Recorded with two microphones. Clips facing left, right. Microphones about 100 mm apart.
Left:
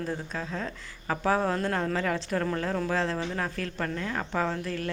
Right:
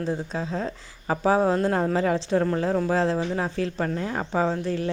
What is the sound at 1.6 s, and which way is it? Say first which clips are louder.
Speech: right 6 dB; 30° right (ahead or behind).